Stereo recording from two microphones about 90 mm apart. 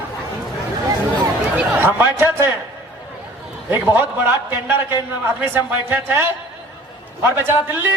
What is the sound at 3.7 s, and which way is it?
A man's voice, 25° right (ahead or behind).